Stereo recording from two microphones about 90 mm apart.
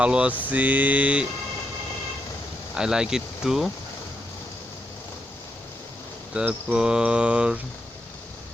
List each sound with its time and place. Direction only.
0.0 s mantra: 15° right (ahead or behind)
2.7 s mantra: 10° right (ahead or behind)
6.5 s mantra: 10° right (ahead or behind)